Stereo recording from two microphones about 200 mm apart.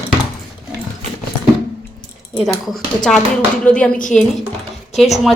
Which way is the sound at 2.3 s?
Centre (ahead or behind).